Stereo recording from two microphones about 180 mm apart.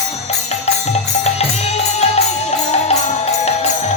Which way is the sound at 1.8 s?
35° left (ahead or behind).